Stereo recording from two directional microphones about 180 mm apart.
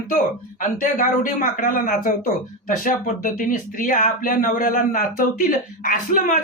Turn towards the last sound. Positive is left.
turn(degrees=50)  # may be behind; listen again after turning